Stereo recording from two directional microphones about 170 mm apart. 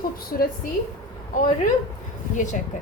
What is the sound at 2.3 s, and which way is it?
Speech, 45° left (ahead or behind).